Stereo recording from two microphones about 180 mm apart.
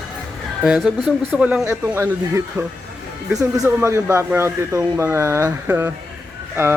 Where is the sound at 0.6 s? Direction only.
Centre (ahead or behind).